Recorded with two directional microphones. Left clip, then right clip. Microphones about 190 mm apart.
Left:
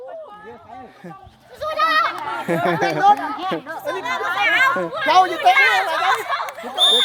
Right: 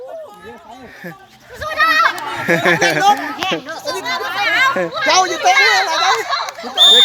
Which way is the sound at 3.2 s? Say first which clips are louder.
Right 4 dB; 30° right (ahead or behind).